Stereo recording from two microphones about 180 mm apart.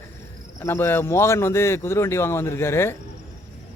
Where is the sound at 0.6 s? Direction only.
15° left (ahead or behind).